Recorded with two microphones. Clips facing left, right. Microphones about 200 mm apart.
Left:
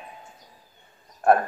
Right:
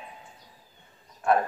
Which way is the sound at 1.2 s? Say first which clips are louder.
Left 4 dB; 55° left (ahead or behind).